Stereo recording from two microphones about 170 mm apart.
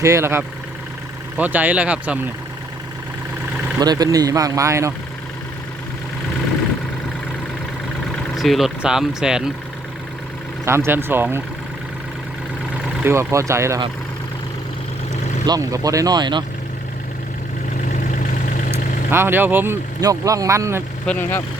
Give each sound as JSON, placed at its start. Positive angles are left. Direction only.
{"t": 0.0, "sound": "speech", "side_deg": -15}
{"t": 3.8, "sound": "speech", "side_deg": -25}
{"t": 8.4, "sound": "speech", "side_deg": 0}
{"t": 10.7, "sound": "speech", "side_deg": -15}
{"t": 13.1, "sound": "speech", "side_deg": -15}
{"t": 15.4, "sound": "speech", "side_deg": -20}
{"t": 18.1, "sound": "vehicle", "side_deg": 50}
{"t": 19.1, "sound": "speech", "side_deg": -15}
{"t": 21.1, "sound": "speech", "side_deg": 10}